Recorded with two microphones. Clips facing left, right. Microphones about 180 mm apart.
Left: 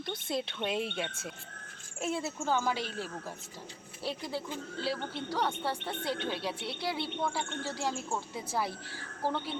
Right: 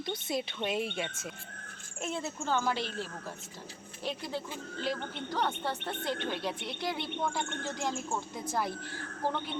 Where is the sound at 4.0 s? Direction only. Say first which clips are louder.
Even; 10° left (ahead or behind).